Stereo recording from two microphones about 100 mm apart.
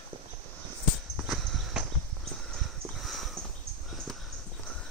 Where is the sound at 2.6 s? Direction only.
Centre (ahead or behind).